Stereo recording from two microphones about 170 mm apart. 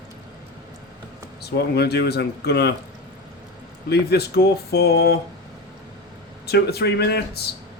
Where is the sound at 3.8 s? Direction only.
75° left (ahead or behind).